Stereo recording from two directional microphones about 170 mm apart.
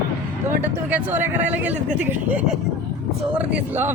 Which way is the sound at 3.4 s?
10° right (ahead or behind).